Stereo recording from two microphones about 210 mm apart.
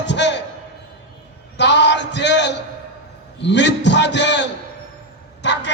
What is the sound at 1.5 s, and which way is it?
A man's voice, 55° left (ahead or behind).